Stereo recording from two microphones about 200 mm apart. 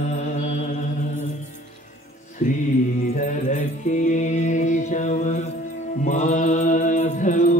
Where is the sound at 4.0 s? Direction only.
35° left (ahead or behind).